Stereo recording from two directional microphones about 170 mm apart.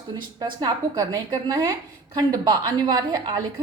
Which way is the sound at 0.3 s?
25° right (ahead or behind).